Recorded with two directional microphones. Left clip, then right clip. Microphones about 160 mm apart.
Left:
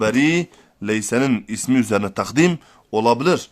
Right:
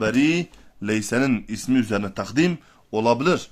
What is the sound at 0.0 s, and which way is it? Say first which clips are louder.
Speech: left 3 dB; 45° left (ahead or behind).